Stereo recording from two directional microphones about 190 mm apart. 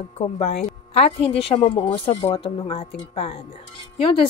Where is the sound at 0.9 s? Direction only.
30° left (ahead or behind).